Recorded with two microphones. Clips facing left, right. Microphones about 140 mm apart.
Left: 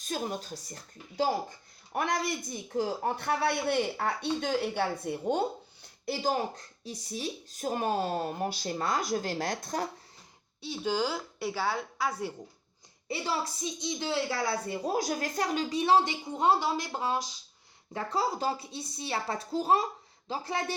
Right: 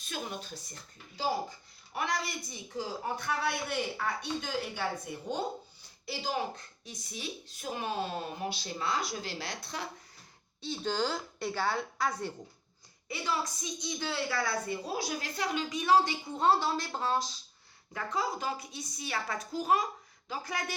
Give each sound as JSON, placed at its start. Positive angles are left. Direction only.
{"t": 0.0, "sound": "speech", "side_deg": 40}
{"t": 6.1, "sound": "speech", "side_deg": 45}
{"t": 10.6, "sound": "a woman's voice", "side_deg": 10}
{"t": 13.1, "sound": "speech", "side_deg": 30}
{"t": 14.8, "sound": "a woman's voice", "side_deg": 45}
{"t": 17.9, "sound": "speech", "side_deg": 35}